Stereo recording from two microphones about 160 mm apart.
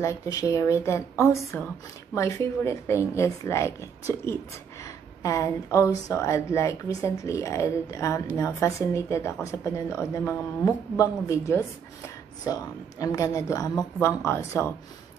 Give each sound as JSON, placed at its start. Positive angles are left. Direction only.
{"t": 0.0, "sound": "speech", "side_deg": 20}
{"t": 13.0, "sound": "speech", "side_deg": 20}